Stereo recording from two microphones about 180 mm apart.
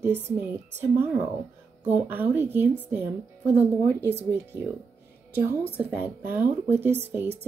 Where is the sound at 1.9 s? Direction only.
10° right (ahead or behind).